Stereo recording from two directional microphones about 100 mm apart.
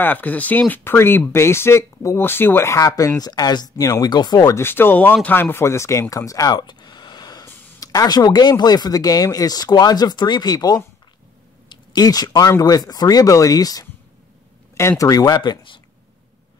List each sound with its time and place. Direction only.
0.0 s speech: 15° left (ahead or behind); by 4.6 s 45° left (ahead or behind)
4.6 s speech: 20° left (ahead or behind)
6.5 s a sound: 50° left (ahead or behind)
7.4 s speech: 35° left (ahead or behind); by 15.8 s 55° left (ahead or behind)